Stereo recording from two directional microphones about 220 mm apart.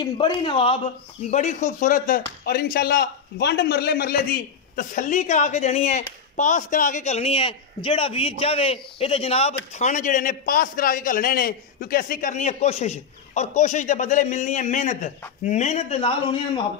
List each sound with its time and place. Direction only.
0.0 s a man's voice: 25° left (ahead or behind)